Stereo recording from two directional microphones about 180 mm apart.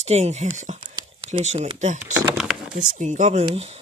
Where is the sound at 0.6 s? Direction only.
40° right (ahead or behind).